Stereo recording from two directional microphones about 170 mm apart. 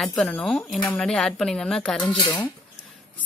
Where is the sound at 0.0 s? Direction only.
5° left (ahead or behind).